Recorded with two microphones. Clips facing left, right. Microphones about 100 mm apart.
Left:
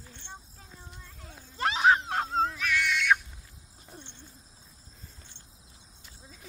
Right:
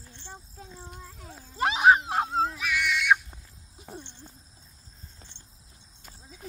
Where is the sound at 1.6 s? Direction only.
15° right (ahead or behind).